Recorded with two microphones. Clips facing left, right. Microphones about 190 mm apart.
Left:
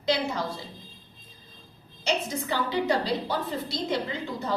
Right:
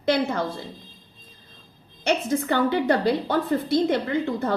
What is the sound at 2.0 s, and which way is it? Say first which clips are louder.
A woman's voice: right 6 dB; 55° right (ahead or behind).